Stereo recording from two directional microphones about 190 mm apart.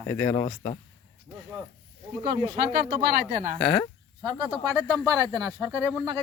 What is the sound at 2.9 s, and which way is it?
Speech, 55° right (ahead or behind).